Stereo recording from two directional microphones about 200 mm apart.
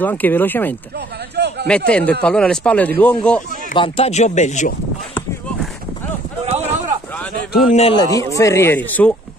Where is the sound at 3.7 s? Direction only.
25° left (ahead or behind).